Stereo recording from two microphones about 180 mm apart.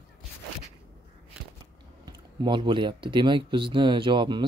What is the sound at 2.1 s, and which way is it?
Speech, 25° right (ahead or behind).